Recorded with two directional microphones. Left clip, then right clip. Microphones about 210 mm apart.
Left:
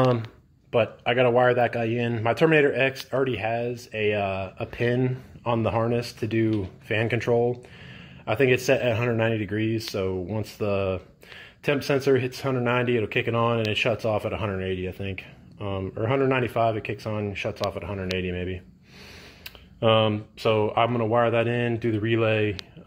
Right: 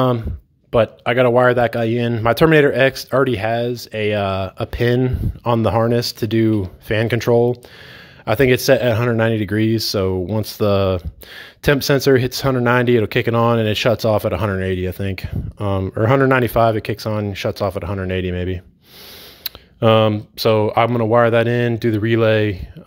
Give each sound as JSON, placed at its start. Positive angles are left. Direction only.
{"t": 0.7, "sound": "speech", "side_deg": -40}